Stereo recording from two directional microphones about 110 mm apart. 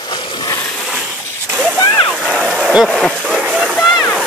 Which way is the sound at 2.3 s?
5° left (ahead or behind).